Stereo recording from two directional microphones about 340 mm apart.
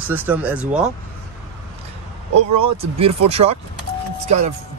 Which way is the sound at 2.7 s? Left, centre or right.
Centre.